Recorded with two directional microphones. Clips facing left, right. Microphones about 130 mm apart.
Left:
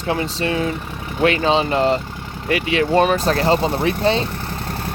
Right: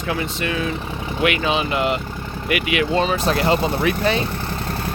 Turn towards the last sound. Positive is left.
turn(degrees=25)  # may be behind; listen again after turning